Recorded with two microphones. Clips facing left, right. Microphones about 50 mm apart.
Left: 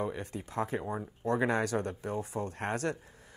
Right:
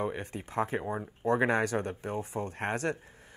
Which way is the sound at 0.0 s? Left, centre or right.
Right.